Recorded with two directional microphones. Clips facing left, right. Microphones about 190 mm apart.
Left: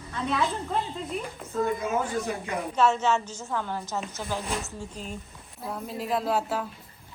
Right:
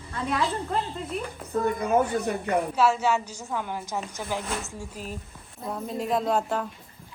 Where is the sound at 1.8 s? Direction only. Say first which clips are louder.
Right 4 dB; 60° right (ahead or behind).